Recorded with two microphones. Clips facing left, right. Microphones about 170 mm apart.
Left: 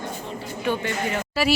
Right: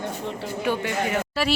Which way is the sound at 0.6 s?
10° right (ahead or behind).